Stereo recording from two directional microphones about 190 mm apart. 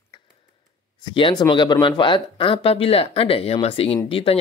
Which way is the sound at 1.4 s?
25° left (ahead or behind).